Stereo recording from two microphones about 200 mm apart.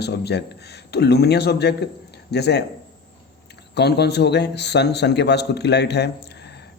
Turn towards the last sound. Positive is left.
turn(degrees=55)  # may be behind; listen again after turning